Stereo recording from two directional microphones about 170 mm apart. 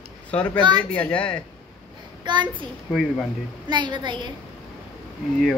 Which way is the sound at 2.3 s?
25° right (ahead or behind).